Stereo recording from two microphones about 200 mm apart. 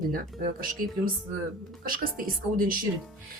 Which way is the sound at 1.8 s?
45° right (ahead or behind).